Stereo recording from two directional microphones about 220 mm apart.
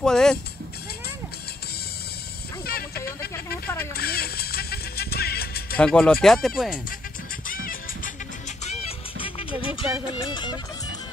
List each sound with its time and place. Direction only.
0.0 s speech: 5° left (ahead or behind)
2.6 s snake: 45° left (ahead or behind)
3.9 s music: 45° left (ahead or behind)
5.8 s speech: 5° left (ahead or behind)
7.4 s music: 40° left (ahead or behind)
8.6 s music: 25° left (ahead or behind)